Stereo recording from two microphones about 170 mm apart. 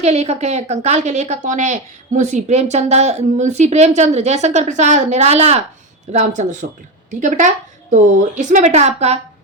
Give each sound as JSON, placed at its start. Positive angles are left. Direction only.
{"t": 0.0, "sound": "a woman's voice", "side_deg": -40}